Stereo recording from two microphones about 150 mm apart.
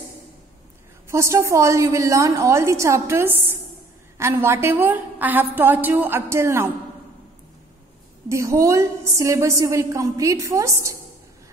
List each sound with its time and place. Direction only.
1.0 s a woman's voice: 20° right (ahead or behind)
8.3 s a woman's voice: 20° right (ahead or behind)